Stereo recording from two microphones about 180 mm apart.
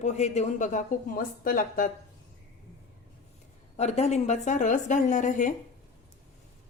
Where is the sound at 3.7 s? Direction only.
35° left (ahead or behind).